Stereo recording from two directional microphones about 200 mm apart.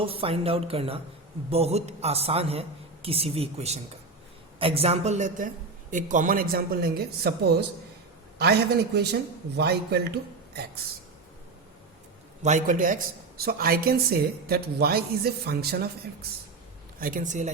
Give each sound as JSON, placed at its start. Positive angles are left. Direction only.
{"t": 0.0, "sound": "a man's voice", "side_deg": -30}
{"t": 9.0, "sound": "speech", "side_deg": -55}
{"t": 12.4, "sound": "a woman's voice", "side_deg": -35}
{"t": 17.0, "sound": "a woman's voice", "side_deg": -40}